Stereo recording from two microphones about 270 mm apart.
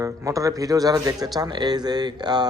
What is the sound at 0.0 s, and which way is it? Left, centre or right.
Speech, centre.